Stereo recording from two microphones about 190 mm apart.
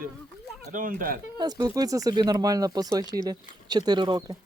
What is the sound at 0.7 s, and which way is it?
Speech, 45° right (ahead or behind).